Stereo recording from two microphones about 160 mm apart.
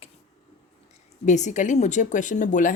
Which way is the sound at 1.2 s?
50° left (ahead or behind).